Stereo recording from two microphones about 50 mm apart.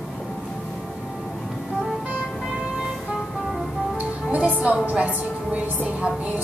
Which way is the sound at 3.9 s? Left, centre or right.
Right.